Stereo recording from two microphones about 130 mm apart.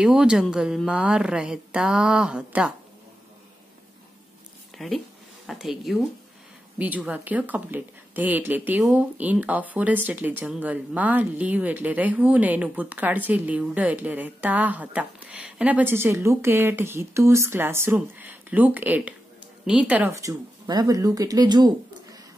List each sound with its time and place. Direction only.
0.0 s speech: 5° right (ahead or behind)
4.7 s speech: centre (ahead or behind)
6.8 s speech: 10° right (ahead or behind)
20.2 s speech: 25° right (ahead or behind)